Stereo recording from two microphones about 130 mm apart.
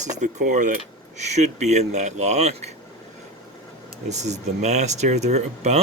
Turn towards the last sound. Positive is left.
turn(degrees=-60)  # may be behind; listen again after turning